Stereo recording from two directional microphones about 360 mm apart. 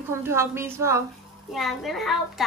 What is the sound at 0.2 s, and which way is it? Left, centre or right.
A woman's voice, centre.